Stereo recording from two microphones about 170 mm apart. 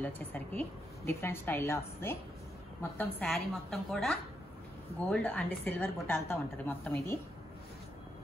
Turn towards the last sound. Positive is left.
turn(degrees=15)  # may be behind; listen again after turning